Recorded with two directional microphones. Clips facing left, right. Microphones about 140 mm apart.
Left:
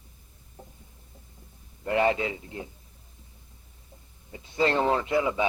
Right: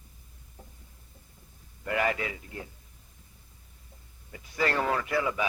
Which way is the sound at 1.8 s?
25° left (ahead or behind).